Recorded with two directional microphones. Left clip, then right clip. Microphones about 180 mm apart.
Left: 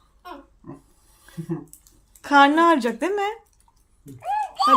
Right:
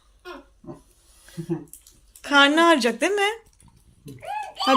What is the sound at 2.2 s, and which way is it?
Speech, 25° left (ahead or behind).